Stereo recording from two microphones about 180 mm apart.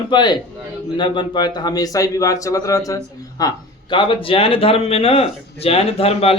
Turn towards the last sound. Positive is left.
turn(degrees=35)  # may be behind; listen again after turning